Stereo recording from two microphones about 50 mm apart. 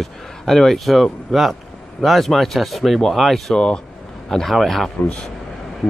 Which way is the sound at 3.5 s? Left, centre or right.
Centre.